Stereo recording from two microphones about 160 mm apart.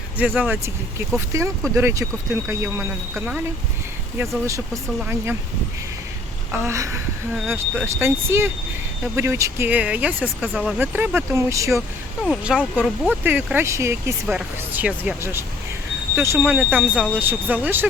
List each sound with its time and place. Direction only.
0.2 s speech: 10° right (ahead or behind)
4.4 s speech: 20° right (ahead or behind)
6.5 s speech: 15° right (ahead or behind); by 10.8 s centre (ahead or behind)
10.8 s speech: 10° right (ahead or behind)
12.2 s speech: 5° right (ahead or behind)